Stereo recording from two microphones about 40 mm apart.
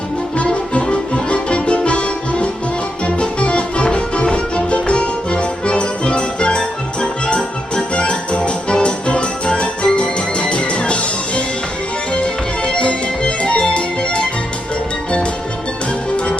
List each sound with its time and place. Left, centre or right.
0.3 s music: left
12.6 s music: left
16.1 s music: left